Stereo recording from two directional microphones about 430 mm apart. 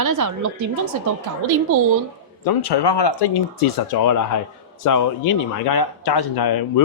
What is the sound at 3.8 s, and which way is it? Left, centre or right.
Speech, left.